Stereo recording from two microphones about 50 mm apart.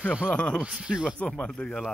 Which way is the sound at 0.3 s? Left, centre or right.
Left.